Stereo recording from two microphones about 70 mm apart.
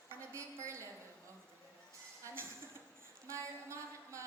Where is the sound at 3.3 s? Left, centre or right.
Right.